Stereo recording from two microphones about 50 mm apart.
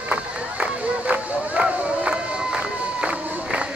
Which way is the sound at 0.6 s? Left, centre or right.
Right.